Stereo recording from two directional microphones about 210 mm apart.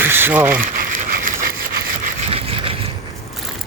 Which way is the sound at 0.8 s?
40° right (ahead or behind).